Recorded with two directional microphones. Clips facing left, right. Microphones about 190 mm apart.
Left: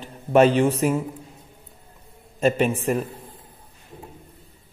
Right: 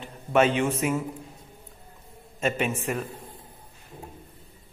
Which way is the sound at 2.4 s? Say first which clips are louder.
Left 6 dB; 35° left (ahead or behind).